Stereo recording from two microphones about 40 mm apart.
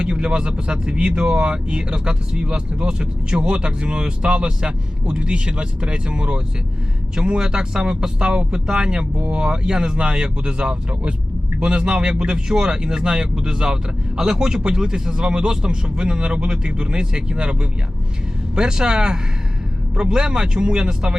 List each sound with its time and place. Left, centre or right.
0.0 s speech: right